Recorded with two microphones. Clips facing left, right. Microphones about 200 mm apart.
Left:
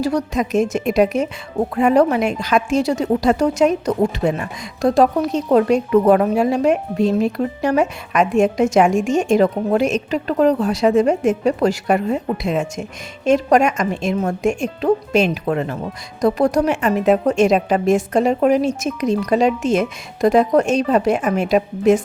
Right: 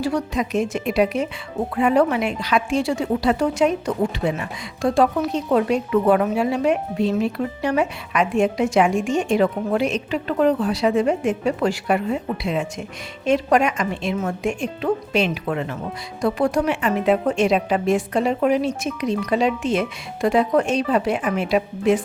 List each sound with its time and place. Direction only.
0.0 s a woman's voice: 40° left (ahead or behind)